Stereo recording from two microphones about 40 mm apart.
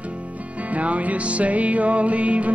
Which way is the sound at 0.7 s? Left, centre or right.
Right.